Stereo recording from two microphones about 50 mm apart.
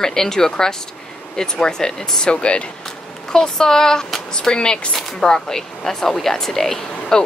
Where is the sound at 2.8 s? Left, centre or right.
Centre.